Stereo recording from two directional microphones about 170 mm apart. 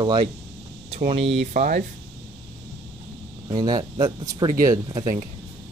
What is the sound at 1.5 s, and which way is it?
Speech, 50° right (ahead or behind).